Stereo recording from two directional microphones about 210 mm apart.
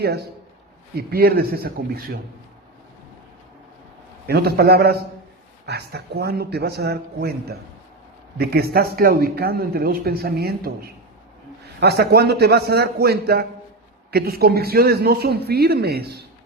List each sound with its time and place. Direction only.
0.0 s speech: 50° right (ahead or behind)
4.3 s speech: 50° right (ahead or behind)